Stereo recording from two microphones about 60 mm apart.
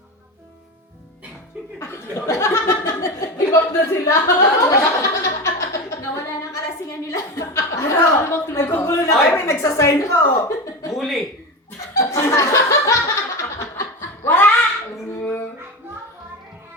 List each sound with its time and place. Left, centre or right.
1.8 s chuckle: left
9.5 s a woman's voice: left
10.9 s speech: centre
11.9 s laughter: left
14.3 s a sound: left